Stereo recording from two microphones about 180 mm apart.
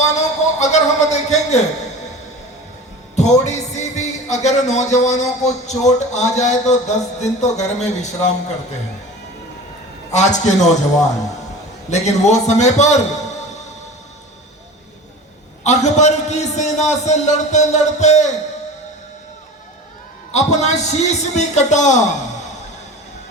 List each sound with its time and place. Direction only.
0.0 s a sound: 40° left (ahead or behind)
3.4 s speech: 40° left (ahead or behind)
10.1 s speech: 40° left (ahead or behind)
11.9 s speech: 40° left (ahead or behind)
15.6 s speech: 40° left (ahead or behind)
20.3 s speech: 40° left (ahead or behind)